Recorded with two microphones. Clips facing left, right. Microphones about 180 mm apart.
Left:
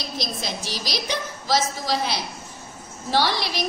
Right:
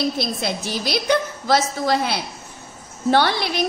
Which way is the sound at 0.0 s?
55° right (ahead or behind).